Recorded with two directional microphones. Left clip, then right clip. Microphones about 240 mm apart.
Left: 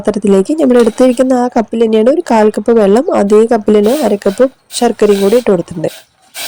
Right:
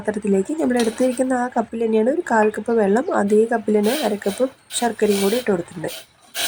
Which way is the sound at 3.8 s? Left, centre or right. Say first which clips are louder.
Left 10 dB; centre.